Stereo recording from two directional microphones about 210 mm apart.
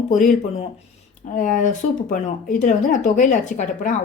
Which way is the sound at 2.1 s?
35° left (ahead or behind).